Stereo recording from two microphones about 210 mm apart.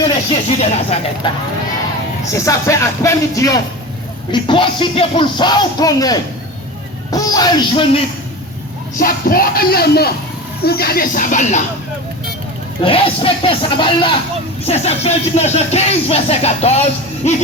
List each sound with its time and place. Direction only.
0.6 s speech: 30° left (ahead or behind)
2.3 s speech: 15° left (ahead or behind)
9.0 s speech: 45° left (ahead or behind)
12.8 s speech: 25° left (ahead or behind)